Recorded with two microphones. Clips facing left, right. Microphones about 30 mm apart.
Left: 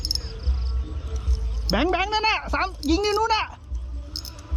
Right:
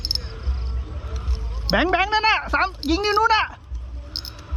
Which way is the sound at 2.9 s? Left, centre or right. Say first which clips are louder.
Right 2 dB; right.